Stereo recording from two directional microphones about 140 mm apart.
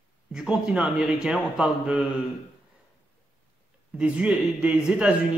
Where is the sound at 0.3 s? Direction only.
5° right (ahead or behind).